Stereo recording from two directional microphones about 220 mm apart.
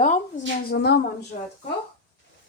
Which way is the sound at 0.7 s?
45° left (ahead or behind).